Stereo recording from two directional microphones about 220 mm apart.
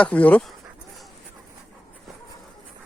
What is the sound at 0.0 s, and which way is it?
Speech, 5° left (ahead or behind).